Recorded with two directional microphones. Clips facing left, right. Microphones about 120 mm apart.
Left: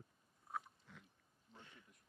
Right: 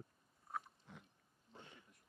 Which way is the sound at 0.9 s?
20° right (ahead or behind).